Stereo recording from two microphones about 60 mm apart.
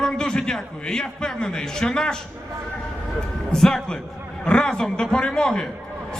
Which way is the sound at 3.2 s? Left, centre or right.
Centre.